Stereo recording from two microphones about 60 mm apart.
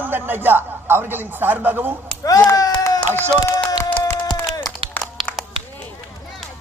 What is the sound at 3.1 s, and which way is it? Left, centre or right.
Speech, left.